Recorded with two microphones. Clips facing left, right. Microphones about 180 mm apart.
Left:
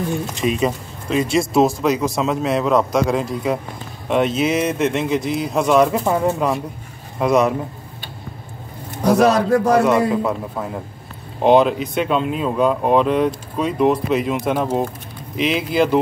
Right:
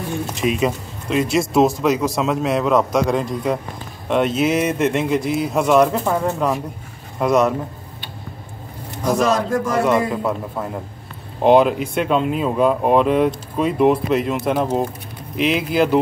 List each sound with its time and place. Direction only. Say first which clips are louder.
0.4 s speech: right 1 dB; centre (ahead or behind)
6.0 s speech: left 1 dB; 10° left (ahead or behind)
9.0 s a sound: left 4 dB; 65° left (ahead or behind)
9.8 s speech: left 2 dB; centre (ahead or behind)